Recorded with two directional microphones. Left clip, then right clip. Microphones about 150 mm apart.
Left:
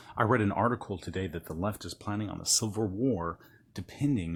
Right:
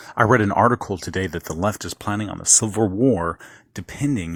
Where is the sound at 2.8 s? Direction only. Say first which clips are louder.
Right 12 dB; 40° right (ahead or behind).